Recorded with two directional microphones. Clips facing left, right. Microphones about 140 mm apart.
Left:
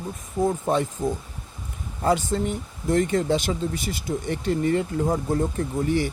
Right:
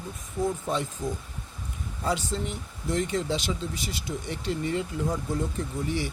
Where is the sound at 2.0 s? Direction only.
50° left (ahead or behind).